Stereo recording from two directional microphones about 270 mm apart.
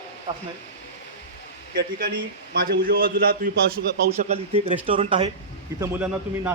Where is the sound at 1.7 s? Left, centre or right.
Right; by 5.3 s centre.